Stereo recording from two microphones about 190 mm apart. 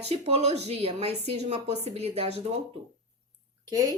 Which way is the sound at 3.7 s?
20° right (ahead or behind).